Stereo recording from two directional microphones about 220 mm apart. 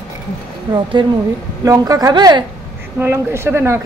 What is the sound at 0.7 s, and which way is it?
Speech, 20° right (ahead or behind).